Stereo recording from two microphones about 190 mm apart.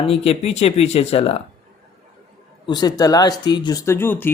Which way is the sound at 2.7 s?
20° left (ahead or behind).